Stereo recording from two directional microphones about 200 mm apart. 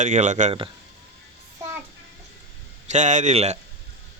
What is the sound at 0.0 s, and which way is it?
Speech, 40° right (ahead or behind).